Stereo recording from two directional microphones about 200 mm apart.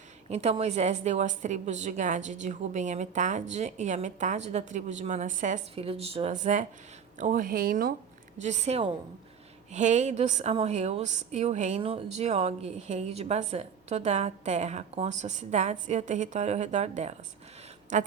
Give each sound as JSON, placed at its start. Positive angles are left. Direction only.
{"t": 0.3, "sound": "a woman's voice", "side_deg": -30}
{"t": 8.4, "sound": "a woman's voice", "side_deg": -35}